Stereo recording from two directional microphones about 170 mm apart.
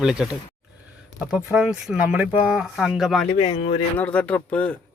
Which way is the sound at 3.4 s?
35° left (ahead or behind).